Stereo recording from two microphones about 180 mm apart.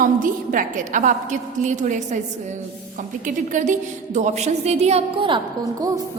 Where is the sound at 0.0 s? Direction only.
50° right (ahead or behind).